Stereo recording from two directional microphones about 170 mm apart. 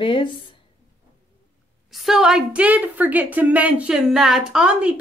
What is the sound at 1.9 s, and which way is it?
A woman's voice, centre (ahead or behind).